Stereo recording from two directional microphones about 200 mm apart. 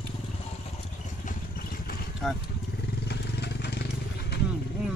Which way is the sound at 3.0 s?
55° left (ahead or behind).